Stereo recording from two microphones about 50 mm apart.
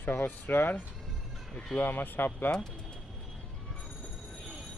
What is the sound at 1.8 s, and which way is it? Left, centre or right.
Speech, left.